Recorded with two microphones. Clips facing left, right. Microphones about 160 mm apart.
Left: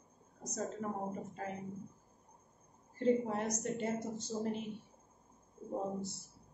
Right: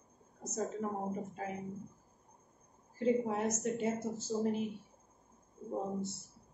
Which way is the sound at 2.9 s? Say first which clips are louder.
Even; 5° right (ahead or behind).